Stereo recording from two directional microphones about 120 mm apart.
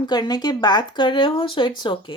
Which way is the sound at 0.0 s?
35° left (ahead or behind).